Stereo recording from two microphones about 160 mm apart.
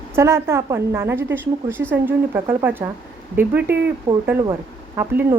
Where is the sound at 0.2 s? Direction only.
15° right (ahead or behind).